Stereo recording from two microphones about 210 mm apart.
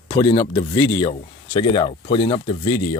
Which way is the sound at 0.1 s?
20° left (ahead or behind).